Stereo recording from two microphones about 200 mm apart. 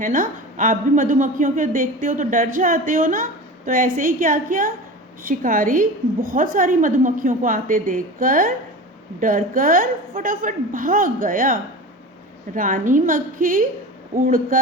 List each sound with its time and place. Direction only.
0.0 s a woman's voice: 40° right (ahead or behind)